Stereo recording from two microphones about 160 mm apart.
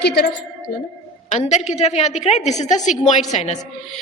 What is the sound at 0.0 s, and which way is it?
Speech, 90° left.